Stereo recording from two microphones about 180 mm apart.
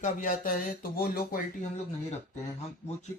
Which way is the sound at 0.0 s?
50° left (ahead or behind).